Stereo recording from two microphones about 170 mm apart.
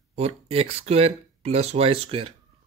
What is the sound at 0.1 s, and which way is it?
Speech, 40° right (ahead or behind).